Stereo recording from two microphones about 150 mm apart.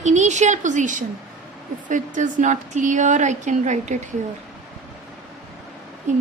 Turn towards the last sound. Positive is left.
turn(degrees=-50)  # may be behind; listen again after turning